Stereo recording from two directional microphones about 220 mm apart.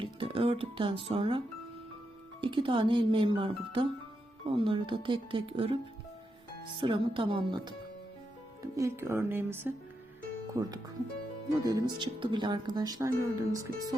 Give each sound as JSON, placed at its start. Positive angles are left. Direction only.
{"t": 0.0, "sound": "music", "side_deg": -25}
{"t": 1.0, "sound": "speech", "side_deg": -25}
{"t": 2.4, "sound": "speech", "side_deg": -20}
{"t": 6.7, "sound": "speech", "side_deg": -25}